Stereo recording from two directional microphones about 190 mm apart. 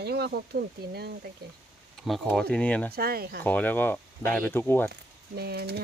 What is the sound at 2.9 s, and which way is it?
Speech, 55° right (ahead or behind).